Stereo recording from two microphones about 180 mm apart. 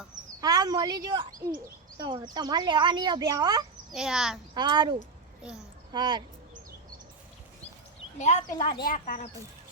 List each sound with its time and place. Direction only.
0.4 s a child's voice: 20° right (ahead or behind)
3.9 s speech: centre (ahead or behind)
4.5 s speech: 25° right (ahead or behind)
8.2 s speech: 45° left (ahead or behind)